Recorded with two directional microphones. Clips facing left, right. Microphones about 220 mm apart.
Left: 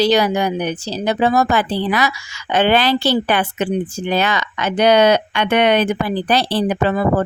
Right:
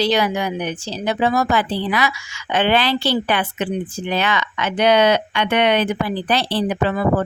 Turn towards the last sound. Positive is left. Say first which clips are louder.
# left 2 dB
turn(degrees=45)  # may be behind; listen again after turning